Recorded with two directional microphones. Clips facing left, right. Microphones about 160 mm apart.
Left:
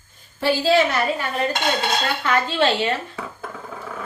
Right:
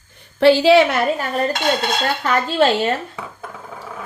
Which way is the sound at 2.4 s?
40° right (ahead or behind).